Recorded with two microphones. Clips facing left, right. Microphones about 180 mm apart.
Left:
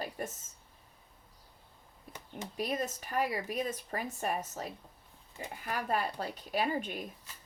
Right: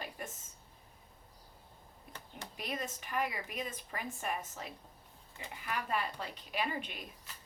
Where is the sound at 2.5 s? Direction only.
40° left (ahead or behind).